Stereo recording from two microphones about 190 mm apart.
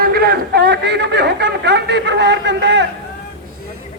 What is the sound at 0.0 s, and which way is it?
A man's voice, 50° right (ahead or behind).